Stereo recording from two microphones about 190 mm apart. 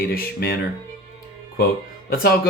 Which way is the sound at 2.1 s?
50° left (ahead or behind).